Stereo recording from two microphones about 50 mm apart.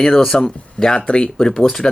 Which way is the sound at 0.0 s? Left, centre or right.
Centre.